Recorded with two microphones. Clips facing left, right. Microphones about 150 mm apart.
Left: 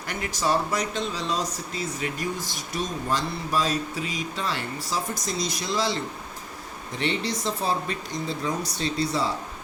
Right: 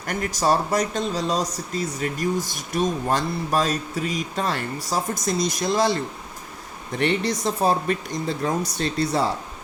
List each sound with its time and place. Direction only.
0.0 s speech: 45° right (ahead or behind)
7.0 s speech: 50° right (ahead or behind)